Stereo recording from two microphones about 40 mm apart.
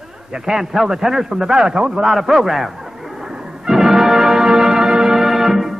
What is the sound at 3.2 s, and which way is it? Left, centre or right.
Music, centre.